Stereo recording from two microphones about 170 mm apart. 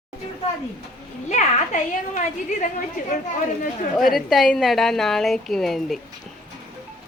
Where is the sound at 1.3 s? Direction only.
45° left (ahead or behind).